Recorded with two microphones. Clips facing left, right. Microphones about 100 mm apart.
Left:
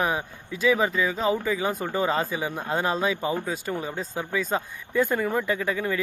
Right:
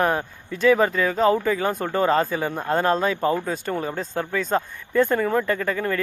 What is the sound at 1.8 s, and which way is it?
Speech, 45° right (ahead or behind).